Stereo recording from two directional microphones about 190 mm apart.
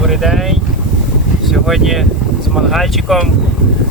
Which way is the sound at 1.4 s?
Centre (ahead or behind).